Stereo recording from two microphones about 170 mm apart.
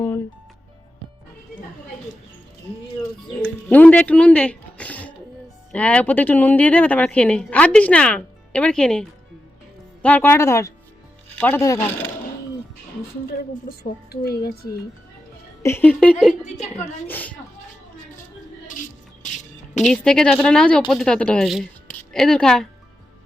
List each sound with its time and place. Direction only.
3.4 s speech: 10° left (ahead or behind)
13.3 s a woman's voice: 60° left (ahead or behind)
15.6 s speech: 10° left (ahead or behind)
19.2 s music: 45° left (ahead or behind)
19.8 s speech: 5° left (ahead or behind)